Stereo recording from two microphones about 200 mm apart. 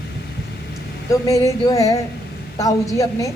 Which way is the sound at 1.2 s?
15° left (ahead or behind).